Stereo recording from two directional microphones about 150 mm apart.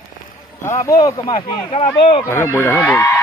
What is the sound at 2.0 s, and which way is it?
Speech, 35° left (ahead or behind).